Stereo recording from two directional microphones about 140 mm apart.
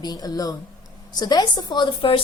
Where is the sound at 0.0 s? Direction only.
30° left (ahead or behind).